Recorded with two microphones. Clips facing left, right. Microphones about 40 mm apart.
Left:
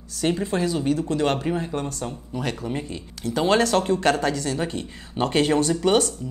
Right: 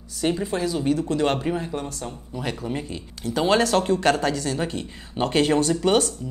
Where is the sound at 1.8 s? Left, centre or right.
Left.